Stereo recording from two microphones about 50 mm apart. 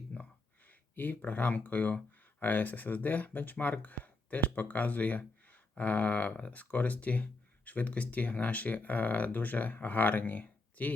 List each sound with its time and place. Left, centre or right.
0.7 s speech: left